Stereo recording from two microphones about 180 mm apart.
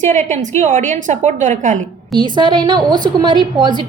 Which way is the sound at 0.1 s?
40° right (ahead or behind).